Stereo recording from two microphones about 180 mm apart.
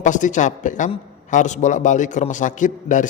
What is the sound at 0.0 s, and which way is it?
A man's voice, 45° left (ahead or behind).